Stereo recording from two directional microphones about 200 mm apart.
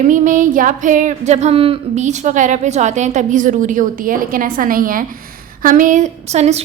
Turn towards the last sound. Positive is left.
turn(degrees=-35)  # may be behind; listen again after turning